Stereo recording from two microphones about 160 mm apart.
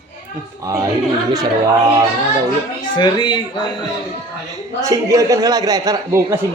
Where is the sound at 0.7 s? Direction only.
20° right (ahead or behind).